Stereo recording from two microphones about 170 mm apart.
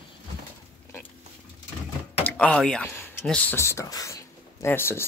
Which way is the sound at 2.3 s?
5° left (ahead or behind).